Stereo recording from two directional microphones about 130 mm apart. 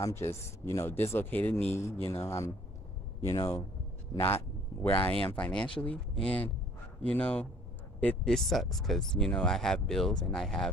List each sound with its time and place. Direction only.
0.0 s speech: 20° left (ahead or behind); by 10.7 s 5° left (ahead or behind)